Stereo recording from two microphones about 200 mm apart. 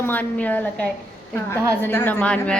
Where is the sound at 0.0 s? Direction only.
10° left (ahead or behind).